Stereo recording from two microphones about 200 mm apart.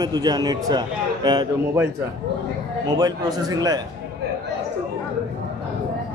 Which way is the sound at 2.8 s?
20° right (ahead or behind).